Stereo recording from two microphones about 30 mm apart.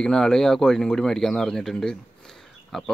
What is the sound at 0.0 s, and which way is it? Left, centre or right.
Speech, left.